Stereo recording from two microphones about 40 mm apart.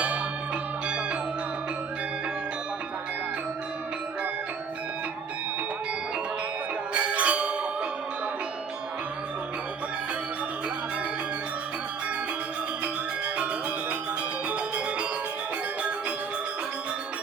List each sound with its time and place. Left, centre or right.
6.9 s music: right